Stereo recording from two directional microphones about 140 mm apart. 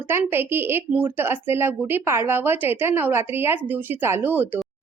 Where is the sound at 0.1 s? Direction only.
15° right (ahead or behind).